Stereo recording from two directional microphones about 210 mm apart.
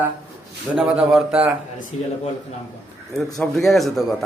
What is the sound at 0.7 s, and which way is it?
Speech, 5° right (ahead or behind).